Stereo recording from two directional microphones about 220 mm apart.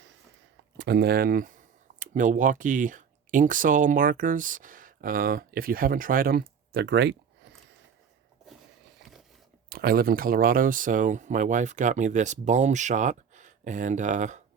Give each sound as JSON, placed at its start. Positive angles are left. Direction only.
{"t": 0.8, "sound": "speech", "side_deg": -50}
{"t": 9.6, "sound": "speech", "side_deg": -45}